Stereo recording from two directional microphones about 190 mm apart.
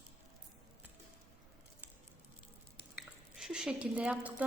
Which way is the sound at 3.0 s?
5° right (ahead or behind).